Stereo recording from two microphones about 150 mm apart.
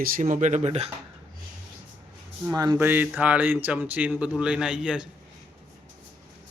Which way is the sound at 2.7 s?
15° right (ahead or behind).